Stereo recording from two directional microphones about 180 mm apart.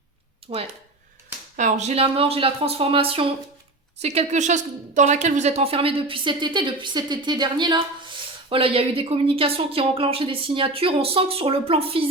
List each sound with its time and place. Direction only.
0.5 s a woman's voice: 35° right (ahead or behind)